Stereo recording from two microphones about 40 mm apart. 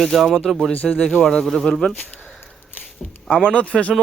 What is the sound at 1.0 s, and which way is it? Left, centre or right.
Speech, centre.